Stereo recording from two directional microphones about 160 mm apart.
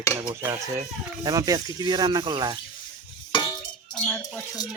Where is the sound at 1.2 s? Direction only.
25° right (ahead or behind).